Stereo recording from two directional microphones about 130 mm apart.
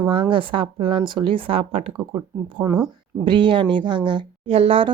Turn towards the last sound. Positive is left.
turn(degrees=-45)  # may be behind; listen again after turning